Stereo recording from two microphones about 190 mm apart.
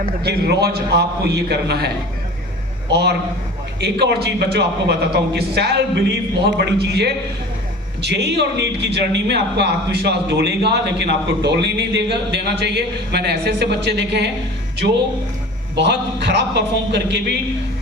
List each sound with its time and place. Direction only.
0.3 s a man's voice: 60° right (ahead or behind)
2.9 s a man's voice: 60° right (ahead or behind)